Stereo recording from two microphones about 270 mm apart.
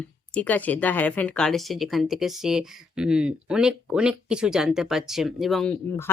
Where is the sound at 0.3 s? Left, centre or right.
Centre.